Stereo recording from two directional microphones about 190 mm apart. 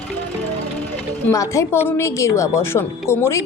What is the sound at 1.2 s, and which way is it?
Speech, 15° left (ahead or behind).